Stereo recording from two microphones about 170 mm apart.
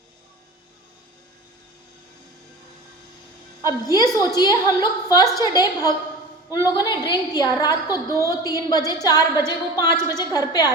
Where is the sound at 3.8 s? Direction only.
20° left (ahead or behind).